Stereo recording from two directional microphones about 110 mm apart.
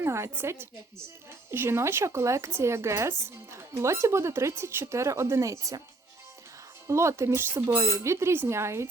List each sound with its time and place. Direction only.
0.0 s speech: 25° right (ahead or behind)
6.8 s speech: 25° right (ahead or behind)